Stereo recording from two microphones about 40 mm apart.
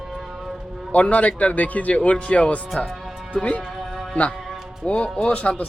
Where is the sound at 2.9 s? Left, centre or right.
Centre.